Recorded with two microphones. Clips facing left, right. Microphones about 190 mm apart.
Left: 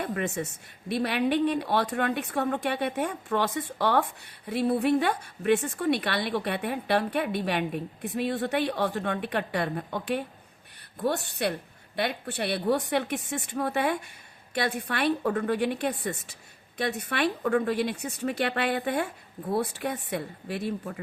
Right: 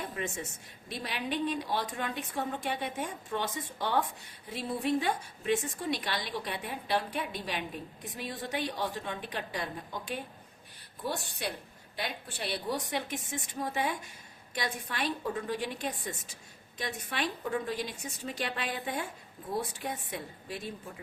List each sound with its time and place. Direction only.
0.0 s a woman's voice: 60° left (ahead or behind)